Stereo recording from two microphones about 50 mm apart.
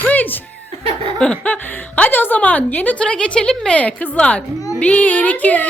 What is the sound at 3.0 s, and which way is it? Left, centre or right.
Speech, left.